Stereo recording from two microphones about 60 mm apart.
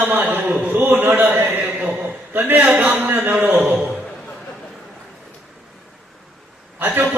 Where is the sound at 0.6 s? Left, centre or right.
Right.